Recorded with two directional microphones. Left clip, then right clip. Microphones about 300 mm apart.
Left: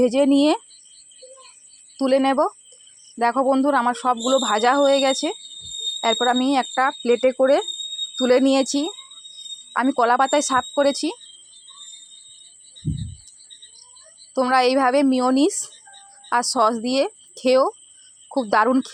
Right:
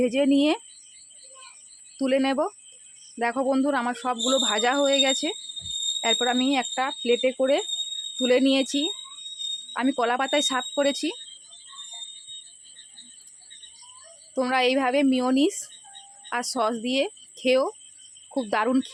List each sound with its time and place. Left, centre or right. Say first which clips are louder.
0.0 s speech: left 5 dB; centre
2.0 s speech: left 5 dB; centre
14.3 s speech: left 5 dB; centre